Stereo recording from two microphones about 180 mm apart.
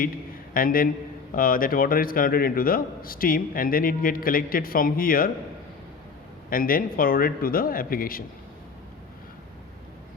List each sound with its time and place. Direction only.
0.5 s a man's voice: 50° left (ahead or behind)
6.5 s a man's voice: 50° left (ahead or behind)